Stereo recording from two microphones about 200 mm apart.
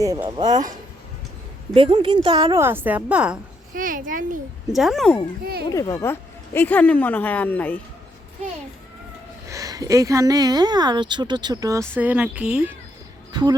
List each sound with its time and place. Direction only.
0.0 s a woman's voice: 20° right (ahead or behind)
1.7 s a woman's voice: 25° right (ahead or behind); by 3.3 s 5° right (ahead or behind)
3.8 s a child's voice: 45° right (ahead or behind)
4.7 s speech: centre (ahead or behind)
5.7 s speech: 15° left (ahead or behind)
9.5 s speech: 15° right (ahead or behind)
13.3 s a woman's voice: 20° right (ahead or behind)